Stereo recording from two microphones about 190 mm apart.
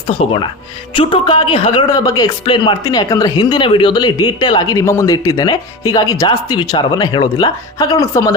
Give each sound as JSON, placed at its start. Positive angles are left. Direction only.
{"t": 0.2, "sound": "speech", "side_deg": 25}